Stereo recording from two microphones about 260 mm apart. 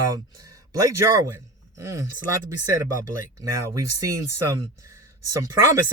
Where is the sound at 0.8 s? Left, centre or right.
Centre.